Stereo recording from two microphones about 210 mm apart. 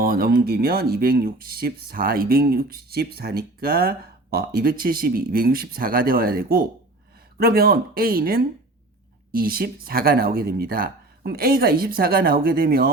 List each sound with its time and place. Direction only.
0.0 s speech: 45° right (ahead or behind)